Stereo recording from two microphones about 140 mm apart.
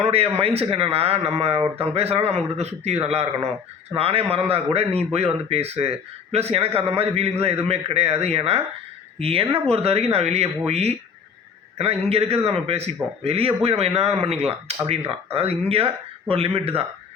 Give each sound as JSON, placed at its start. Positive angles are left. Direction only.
{"t": 0.0, "sound": "a man's voice", "side_deg": -45}